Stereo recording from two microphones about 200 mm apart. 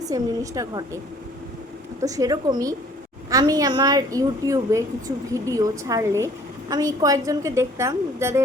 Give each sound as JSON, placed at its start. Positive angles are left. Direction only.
{"t": 0.0, "sound": "a woman's voice", "side_deg": -15}
{"t": 2.0, "sound": "a woman's voice", "side_deg": -15}